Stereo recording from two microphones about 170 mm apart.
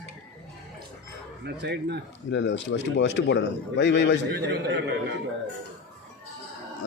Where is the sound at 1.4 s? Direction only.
85° right.